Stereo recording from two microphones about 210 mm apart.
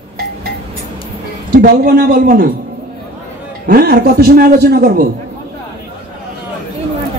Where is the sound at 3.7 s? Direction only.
45° right (ahead or behind).